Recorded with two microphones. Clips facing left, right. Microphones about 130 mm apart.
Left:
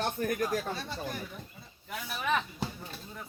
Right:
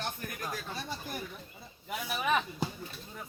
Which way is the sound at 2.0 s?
5° right (ahead or behind).